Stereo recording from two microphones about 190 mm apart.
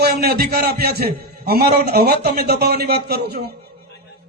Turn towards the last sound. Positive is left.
turn(degrees=-55)  # may be behind; listen again after turning